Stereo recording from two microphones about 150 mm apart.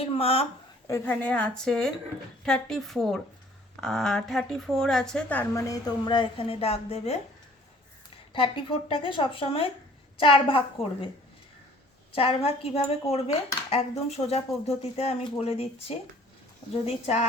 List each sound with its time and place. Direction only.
0.0 s a woman's voice: 40° left (ahead or behind)
0.9 s a woman's voice: 20° left (ahead or behind)
1.1 s a woman's voice: 5° left (ahead or behind)
5.5 s a woman's voice: 25° left (ahead or behind); by 7.2 s 45° left (ahead or behind)
8.3 s a woman's voice: 35° left (ahead or behind)
12.1 s speech: 40° left (ahead or behind)